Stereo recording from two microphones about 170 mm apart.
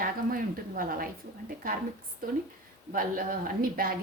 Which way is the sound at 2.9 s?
55° right (ahead or behind).